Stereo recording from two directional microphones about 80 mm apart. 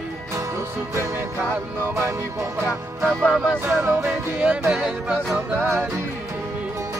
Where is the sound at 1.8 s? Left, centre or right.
Right.